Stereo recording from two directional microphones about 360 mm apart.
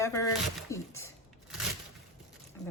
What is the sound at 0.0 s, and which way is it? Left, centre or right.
Speech, centre.